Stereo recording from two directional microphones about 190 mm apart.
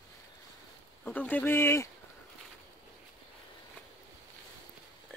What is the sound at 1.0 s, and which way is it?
Speech, 10° left (ahead or behind).